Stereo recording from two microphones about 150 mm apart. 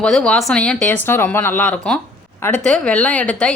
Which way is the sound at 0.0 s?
5° left (ahead or behind).